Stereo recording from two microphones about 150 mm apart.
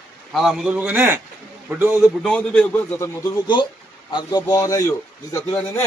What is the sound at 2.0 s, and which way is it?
Speech, 5° left (ahead or behind).